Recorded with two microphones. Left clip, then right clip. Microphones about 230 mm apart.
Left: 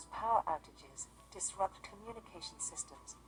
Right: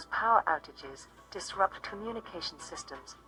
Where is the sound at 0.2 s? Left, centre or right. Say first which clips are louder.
Right 7 dB; right.